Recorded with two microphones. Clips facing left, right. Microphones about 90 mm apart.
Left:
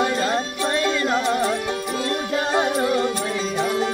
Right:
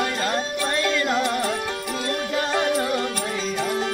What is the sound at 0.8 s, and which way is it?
Music, 25° left (ahead or behind).